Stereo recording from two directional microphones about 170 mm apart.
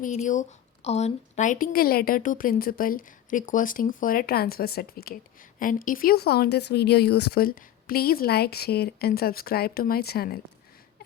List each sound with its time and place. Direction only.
0.0 s speech: 45° left (ahead or behind); by 5.1 s 65° left (ahead or behind)
5.5 s speech: 55° left (ahead or behind)